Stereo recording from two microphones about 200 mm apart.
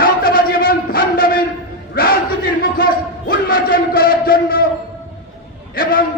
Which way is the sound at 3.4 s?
45° left (ahead or behind).